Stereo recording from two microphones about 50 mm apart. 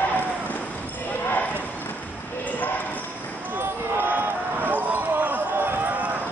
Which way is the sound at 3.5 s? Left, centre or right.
Right.